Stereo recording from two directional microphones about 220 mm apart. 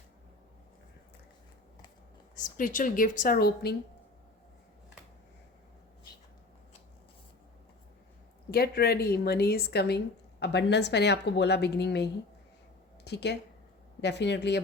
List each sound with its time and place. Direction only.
2.3 s a woman's voice: 35° left (ahead or behind)
8.4 s a woman's voice: 45° left (ahead or behind)
13.1 s a woman's voice: 50° left (ahead or behind)